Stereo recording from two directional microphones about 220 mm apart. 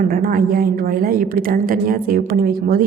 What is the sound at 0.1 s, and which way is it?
A woman's voice, 40° right (ahead or behind).